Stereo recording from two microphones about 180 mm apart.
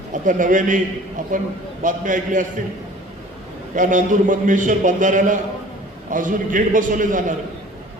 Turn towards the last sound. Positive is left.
turn(degrees=-45)  # may be behind; listen again after turning